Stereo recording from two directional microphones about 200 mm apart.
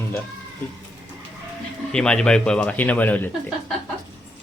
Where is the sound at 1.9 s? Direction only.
5° left (ahead or behind).